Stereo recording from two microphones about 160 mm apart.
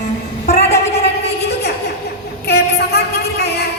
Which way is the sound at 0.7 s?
40° left (ahead or behind).